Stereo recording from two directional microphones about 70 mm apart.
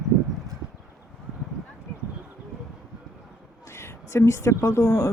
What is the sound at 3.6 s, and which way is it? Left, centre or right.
A woman's voice, left.